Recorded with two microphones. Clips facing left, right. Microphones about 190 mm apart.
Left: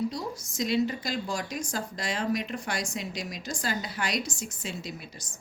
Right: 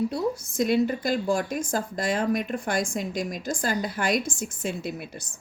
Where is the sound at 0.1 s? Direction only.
55° right (ahead or behind).